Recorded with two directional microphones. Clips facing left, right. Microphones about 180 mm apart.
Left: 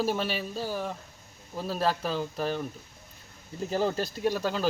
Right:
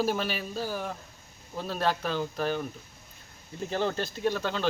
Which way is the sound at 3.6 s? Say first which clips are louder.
Left 2 dB; 5° left (ahead or behind).